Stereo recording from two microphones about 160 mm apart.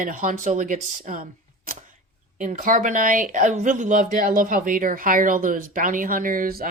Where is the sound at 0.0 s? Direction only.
60° right (ahead or behind).